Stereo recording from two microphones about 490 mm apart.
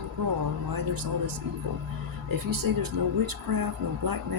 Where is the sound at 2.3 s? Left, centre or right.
Right.